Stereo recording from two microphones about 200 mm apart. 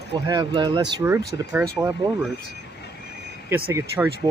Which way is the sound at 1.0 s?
10° right (ahead or behind).